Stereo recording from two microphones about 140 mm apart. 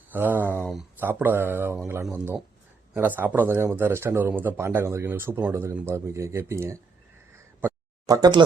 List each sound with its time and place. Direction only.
0.1 s speech: 15° right (ahead or behind)
0.6 s speech: centre (ahead or behind)
0.9 s speech: 15° right (ahead or behind)
7.6 s a sound: 25° right (ahead or behind)